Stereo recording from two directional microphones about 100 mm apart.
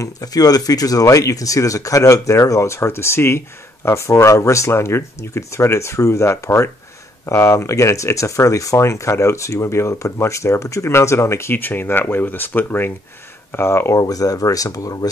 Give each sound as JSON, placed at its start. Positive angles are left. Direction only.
{"t": 0.0, "sound": "speech", "side_deg": 40}
{"t": 13.9, "sound": "speech", "side_deg": 40}